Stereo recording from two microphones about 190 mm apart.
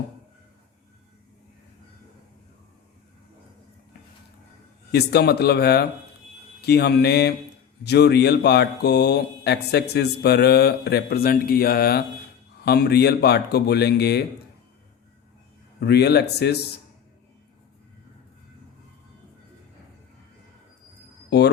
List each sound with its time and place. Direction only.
4.9 s speech: 60° left (ahead or behind)
15.8 s speech: 60° left (ahead or behind)
21.2 s a sound: 60° left (ahead or behind)